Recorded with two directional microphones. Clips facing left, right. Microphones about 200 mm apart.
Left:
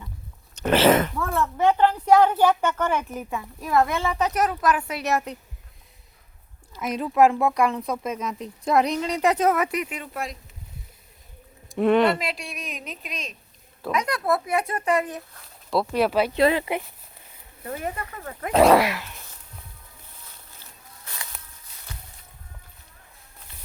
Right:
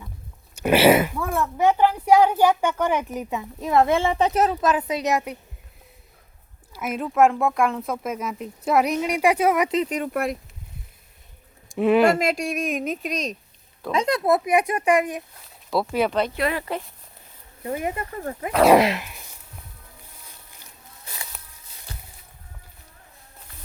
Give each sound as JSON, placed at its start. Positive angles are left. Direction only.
{"t": 0.5, "sound": "speech", "side_deg": -10}
{"t": 6.7, "sound": "speech", "side_deg": -5}
{"t": 9.6, "sound": "a sound", "side_deg": -25}
{"t": 9.9, "sound": "speech", "side_deg": -55}
{"t": 11.8, "sound": "speech", "side_deg": -5}
{"t": 12.2, "sound": "a woman's voice", "side_deg": -45}
{"t": 13.9, "sound": "speech", "side_deg": -25}
{"t": 15.7, "sound": "speech", "side_deg": 0}
{"t": 16.3, "sound": "speech", "side_deg": 25}
{"t": 17.6, "sound": "speech", "side_deg": -10}
{"t": 18.8, "sound": "a sound", "side_deg": -20}